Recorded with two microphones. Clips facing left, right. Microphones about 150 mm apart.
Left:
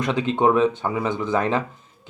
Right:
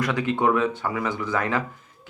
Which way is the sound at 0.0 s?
20° left (ahead or behind).